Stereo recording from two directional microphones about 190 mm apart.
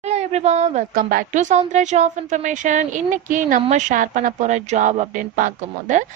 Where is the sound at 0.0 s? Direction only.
35° right (ahead or behind).